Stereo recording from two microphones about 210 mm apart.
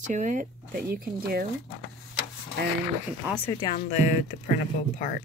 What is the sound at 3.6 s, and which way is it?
Speech, 30° left (ahead or behind).